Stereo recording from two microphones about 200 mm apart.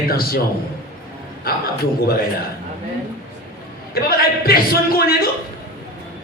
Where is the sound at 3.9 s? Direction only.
50° left (ahead or behind).